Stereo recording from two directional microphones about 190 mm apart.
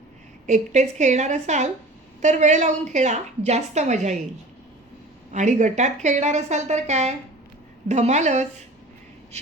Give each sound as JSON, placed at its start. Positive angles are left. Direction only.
{"t": 0.4, "sound": "a woman's voice", "side_deg": -40}
{"t": 5.3, "sound": "a woman's voice", "side_deg": -40}